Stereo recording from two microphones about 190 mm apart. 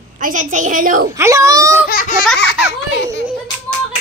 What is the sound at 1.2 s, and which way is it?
Speech, 15° right (ahead or behind).